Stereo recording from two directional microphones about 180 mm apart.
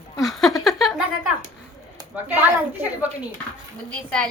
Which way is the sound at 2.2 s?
10° right (ahead or behind).